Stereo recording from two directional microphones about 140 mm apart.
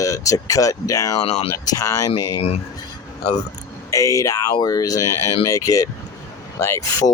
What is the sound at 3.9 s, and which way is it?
Speech, 25° left (ahead or behind).